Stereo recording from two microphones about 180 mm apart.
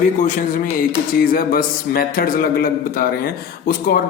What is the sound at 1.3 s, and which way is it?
A man's voice, 55° left (ahead or behind).